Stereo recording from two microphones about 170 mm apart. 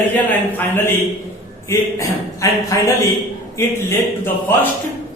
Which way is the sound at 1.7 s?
15° left (ahead or behind).